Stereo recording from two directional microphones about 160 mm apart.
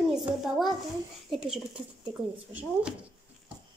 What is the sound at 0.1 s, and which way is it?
A child's voice, centre (ahead or behind).